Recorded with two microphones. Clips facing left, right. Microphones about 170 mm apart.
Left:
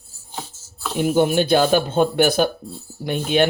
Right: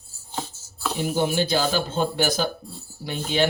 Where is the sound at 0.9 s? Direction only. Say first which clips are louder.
Left 6 dB; 55° left (ahead or behind).